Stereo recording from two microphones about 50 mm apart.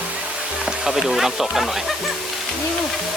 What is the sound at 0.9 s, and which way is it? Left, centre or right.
Speech, centre.